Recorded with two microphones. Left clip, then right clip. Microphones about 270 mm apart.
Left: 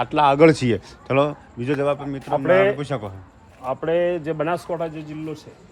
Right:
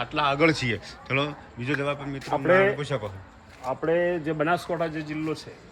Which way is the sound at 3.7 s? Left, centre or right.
Left.